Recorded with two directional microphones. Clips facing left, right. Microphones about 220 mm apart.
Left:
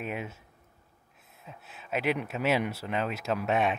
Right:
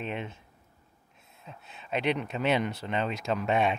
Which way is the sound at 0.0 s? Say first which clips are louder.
Even; 5° left (ahead or behind).